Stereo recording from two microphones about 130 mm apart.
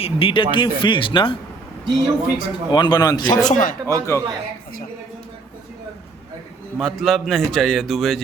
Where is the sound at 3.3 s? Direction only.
75° left (ahead or behind).